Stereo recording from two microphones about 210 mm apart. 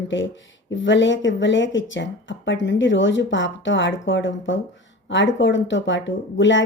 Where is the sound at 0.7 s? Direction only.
60° left (ahead or behind).